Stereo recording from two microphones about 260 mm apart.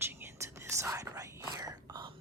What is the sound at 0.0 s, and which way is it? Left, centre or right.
Whispering, centre.